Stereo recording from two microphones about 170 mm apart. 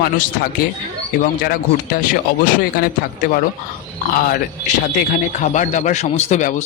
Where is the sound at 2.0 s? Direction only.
55° left (ahead or behind).